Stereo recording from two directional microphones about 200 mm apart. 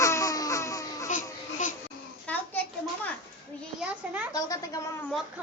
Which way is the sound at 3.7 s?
5° right (ahead or behind).